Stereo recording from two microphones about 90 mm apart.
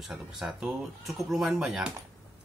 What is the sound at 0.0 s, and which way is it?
Speech, 5° right (ahead or behind).